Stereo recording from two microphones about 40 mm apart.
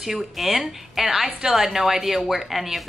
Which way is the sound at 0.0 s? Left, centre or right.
Centre.